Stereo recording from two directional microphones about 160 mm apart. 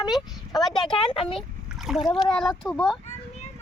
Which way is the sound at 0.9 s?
35° left (ahead or behind).